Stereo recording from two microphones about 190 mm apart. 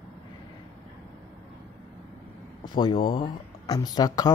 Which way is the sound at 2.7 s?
25° left (ahead or behind).